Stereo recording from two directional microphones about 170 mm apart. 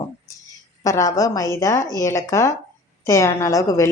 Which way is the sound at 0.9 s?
20° left (ahead or behind).